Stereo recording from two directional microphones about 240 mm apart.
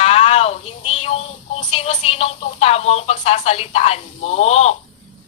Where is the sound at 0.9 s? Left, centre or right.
Left.